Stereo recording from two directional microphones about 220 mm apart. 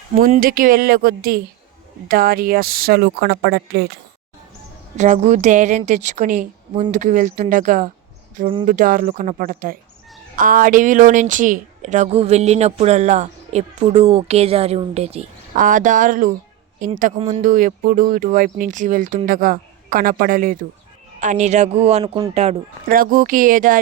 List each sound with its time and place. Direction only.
0.2 s speech: 40° right (ahead or behind)
4.9 s speech: 30° right (ahead or behind)
22.9 s speech: 40° right (ahead or behind)